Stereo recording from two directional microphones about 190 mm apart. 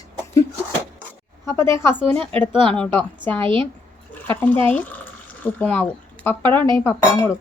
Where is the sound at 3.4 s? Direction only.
25° right (ahead or behind).